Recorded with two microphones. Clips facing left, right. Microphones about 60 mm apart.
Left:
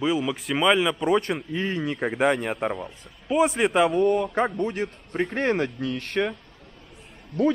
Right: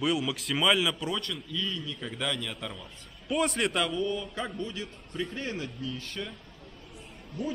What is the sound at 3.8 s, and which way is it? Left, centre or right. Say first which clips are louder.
A man's voice: left 10 dB; left.